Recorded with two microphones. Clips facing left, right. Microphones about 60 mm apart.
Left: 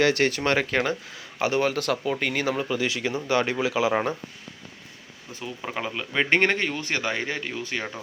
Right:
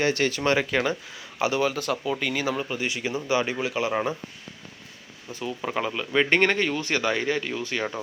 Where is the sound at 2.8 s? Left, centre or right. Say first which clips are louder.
Left 2 dB; left.